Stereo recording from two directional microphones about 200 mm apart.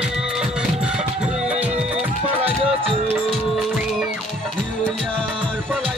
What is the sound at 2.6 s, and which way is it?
Music, 25° right (ahead or behind).